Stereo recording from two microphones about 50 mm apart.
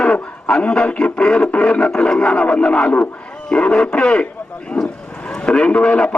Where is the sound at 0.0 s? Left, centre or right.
Centre.